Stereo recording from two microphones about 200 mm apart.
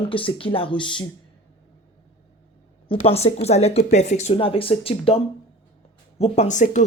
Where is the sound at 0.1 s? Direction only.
25° left (ahead or behind).